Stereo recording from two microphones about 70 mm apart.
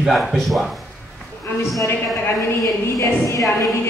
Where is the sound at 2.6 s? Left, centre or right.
Left.